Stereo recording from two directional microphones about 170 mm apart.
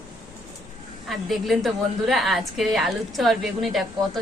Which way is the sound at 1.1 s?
Centre (ahead or behind).